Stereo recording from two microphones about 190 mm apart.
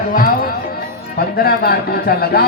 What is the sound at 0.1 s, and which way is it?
A man's voice, 50° left (ahead or behind).